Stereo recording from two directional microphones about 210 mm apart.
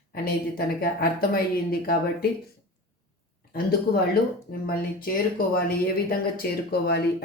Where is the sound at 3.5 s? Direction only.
50° left (ahead or behind).